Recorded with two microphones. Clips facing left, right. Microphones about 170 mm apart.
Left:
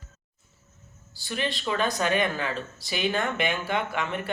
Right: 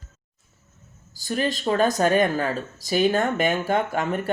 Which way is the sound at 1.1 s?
40° right (ahead or behind).